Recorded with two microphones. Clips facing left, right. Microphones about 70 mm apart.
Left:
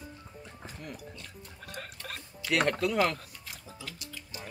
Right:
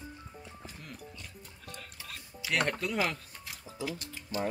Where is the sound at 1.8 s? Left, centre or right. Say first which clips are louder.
Left 8 dB; left.